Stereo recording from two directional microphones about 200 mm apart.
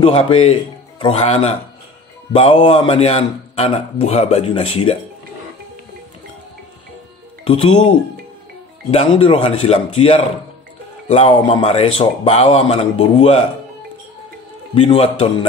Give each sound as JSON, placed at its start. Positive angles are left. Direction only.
{"t": 0.0, "sound": "a man's voice", "side_deg": 25}
{"t": 8.9, "sound": "a man's voice", "side_deg": 30}
{"t": 14.7, "sound": "a man's voice", "side_deg": 30}